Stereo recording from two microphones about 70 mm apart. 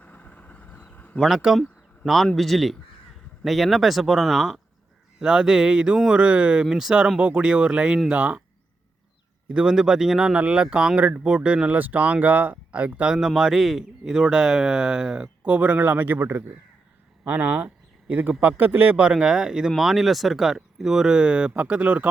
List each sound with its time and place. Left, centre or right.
0.0 s vehicle: left
0.9 s a sound: left
1.2 s a man's voice: centre
9.5 s a man's voice: centre
13.1 s a man's voice: centre; by 16.6 s right
17.2 s a man's voice: right